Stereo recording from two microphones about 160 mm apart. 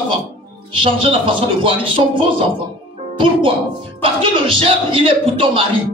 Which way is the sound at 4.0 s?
35° right (ahead or behind).